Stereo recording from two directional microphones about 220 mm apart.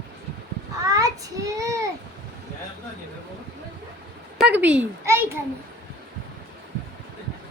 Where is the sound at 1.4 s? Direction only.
15° right (ahead or behind).